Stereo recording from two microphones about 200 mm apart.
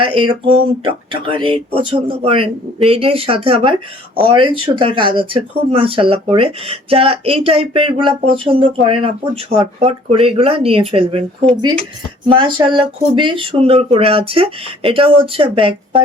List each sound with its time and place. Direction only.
0.0 s speech: 25° right (ahead or behind)
12.3 s speech: 25° right (ahead or behind)